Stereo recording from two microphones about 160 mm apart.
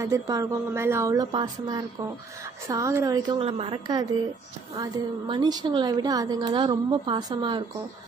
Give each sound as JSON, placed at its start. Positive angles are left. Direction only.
{"t": 0.0, "sound": "a woman's voice", "side_deg": -20}
{"t": 3.3, "sound": "a woman's voice", "side_deg": -35}